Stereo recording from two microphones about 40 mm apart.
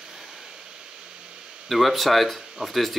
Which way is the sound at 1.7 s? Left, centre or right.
Centre.